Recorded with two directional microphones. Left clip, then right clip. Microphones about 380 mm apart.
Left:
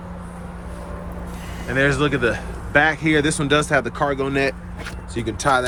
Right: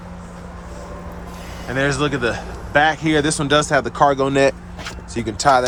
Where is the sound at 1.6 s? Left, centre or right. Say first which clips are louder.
Left 1 dB; centre.